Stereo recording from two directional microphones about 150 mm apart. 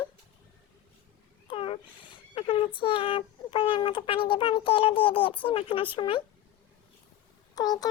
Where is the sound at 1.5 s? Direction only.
35° left (ahead or behind).